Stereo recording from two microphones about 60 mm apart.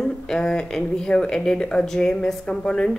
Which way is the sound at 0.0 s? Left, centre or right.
Centre.